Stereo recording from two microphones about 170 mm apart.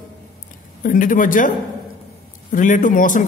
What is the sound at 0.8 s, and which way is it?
A man's voice, 50° left (ahead or behind).